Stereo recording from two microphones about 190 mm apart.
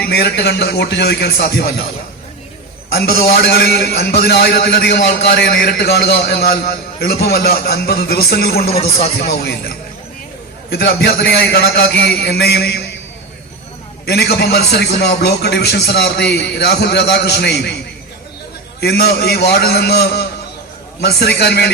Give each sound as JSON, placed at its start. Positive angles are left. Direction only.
{"t": 0.0, "sound": "a man's voice", "side_deg": 55}
{"t": 3.1, "sound": "a man's voice", "side_deg": 55}
{"t": 10.7, "sound": "a man's voice", "side_deg": 55}
{"t": 14.0, "sound": "a man's voice", "side_deg": 55}
{"t": 18.8, "sound": "a man's voice", "side_deg": 55}